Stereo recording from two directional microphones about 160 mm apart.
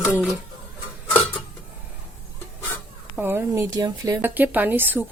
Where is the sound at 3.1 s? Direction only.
15° right (ahead or behind).